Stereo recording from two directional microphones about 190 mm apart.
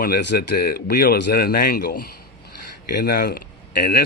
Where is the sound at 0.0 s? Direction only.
55° left (ahead or behind).